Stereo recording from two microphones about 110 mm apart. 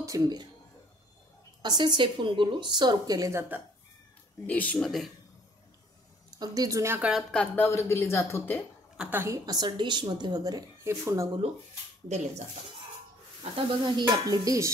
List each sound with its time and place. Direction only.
0.0 s speech: 35° right (ahead or behind)
1.6 s a woman's voice: 40° right (ahead or behind)
4.5 s speech: 15° left (ahead or behind)
6.4 s a woman's voice: 35° right (ahead or behind)
7.0 s speech: 5° right (ahead or behind)
7.5 s speech: 20° left (ahead or behind)
8.9 s a woman's voice: 10° right (ahead or behind)
9.2 s a woman's voice: 30° right (ahead or behind)
10.8 s speech: 25° right (ahead or behind)
13.4 s a woman's voice: 50° right (ahead or behind); by 14.7 s 30° right (ahead or behind)